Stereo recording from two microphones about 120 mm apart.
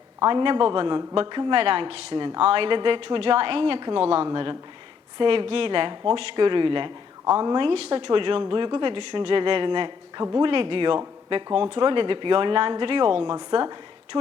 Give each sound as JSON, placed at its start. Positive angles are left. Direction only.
{"t": 0.3, "sound": "speech", "side_deg": -40}